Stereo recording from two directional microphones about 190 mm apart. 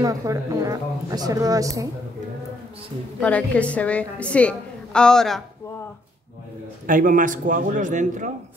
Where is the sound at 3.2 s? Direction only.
5° left (ahead or behind).